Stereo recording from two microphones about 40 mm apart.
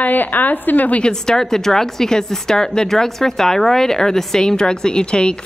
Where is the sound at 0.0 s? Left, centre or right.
Left.